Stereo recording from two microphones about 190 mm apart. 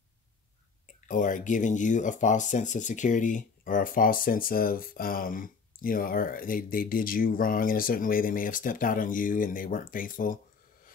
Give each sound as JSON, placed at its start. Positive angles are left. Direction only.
{"t": 1.0, "sound": "speech", "side_deg": 45}